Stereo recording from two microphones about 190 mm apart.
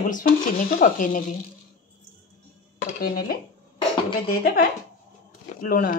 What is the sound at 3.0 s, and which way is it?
Speech, 50° left (ahead or behind).